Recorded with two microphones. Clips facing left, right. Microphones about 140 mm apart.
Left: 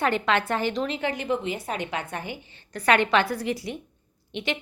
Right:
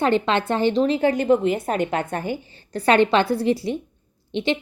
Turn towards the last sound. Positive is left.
turn(degrees=-30)  # may be behind; listen again after turning